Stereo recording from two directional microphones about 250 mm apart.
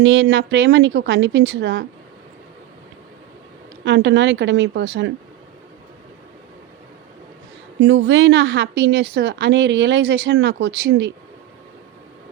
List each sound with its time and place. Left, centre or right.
0.0 s a woman's voice: right
3.8 s a woman's voice: right
7.8 s a woman's voice: right